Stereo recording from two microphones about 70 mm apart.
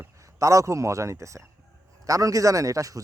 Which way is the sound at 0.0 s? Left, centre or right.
Right.